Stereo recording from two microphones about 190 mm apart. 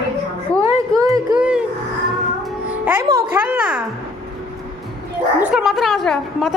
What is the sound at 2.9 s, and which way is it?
Speech, 15° right (ahead or behind).